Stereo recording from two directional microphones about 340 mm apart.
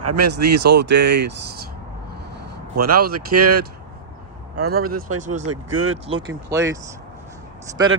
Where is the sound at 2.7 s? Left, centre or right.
Right.